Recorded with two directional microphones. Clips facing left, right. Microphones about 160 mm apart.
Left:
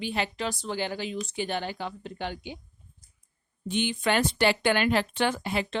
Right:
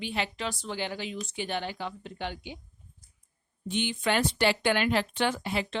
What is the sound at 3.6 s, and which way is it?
Speech, 50° left (ahead or behind).